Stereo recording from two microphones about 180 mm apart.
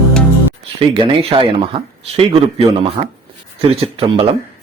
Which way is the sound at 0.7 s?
30° right (ahead or behind).